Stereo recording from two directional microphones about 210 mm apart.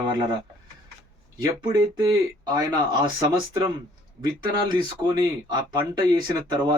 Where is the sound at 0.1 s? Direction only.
20° right (ahead or behind).